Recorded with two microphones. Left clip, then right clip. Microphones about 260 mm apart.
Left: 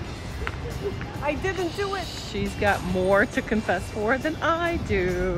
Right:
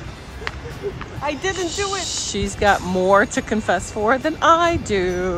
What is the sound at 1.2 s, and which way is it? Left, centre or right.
Speech, right.